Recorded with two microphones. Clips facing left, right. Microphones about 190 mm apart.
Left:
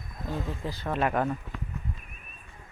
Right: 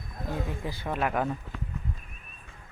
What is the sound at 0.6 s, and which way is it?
Speech, 10° right (ahead or behind).